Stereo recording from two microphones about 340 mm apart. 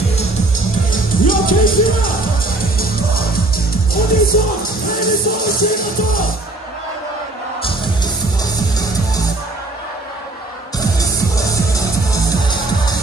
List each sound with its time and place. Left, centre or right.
0.9 s music: left
7.6 s music: centre
10.8 s music: centre